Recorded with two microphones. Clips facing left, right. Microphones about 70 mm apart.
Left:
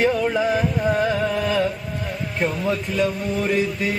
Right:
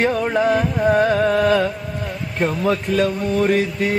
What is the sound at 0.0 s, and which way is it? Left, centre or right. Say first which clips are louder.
Music: right 2 dB; right.